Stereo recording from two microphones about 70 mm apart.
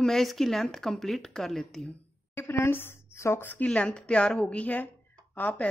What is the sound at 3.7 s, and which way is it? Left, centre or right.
A woman's voice, centre.